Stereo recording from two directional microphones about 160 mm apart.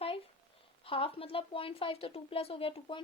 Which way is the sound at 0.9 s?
35° left (ahead or behind).